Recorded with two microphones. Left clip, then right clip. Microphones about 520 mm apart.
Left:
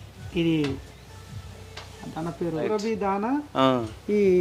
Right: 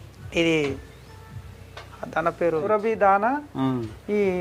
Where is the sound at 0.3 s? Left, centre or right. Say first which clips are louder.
Right 4 dB; right.